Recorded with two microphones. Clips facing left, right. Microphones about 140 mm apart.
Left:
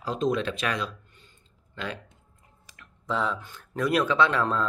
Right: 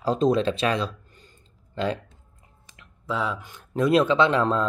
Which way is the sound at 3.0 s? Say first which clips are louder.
Right 1 dB; 5° right (ahead or behind).